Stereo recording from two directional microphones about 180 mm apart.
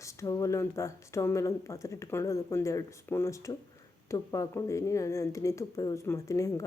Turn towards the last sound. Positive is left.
turn(degrees=15)  # may be behind; listen again after turning